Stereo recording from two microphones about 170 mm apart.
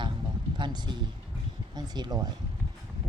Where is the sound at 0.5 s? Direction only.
25° right (ahead or behind).